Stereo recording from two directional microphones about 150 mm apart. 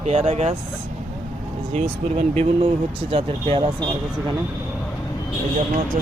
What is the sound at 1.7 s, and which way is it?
Speech, 45° right (ahead or behind).